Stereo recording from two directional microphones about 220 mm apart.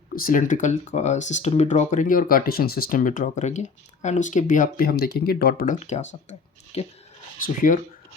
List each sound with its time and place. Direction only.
0.2 s speech: 40° left (ahead or behind)
7.4 s speech: 40° left (ahead or behind)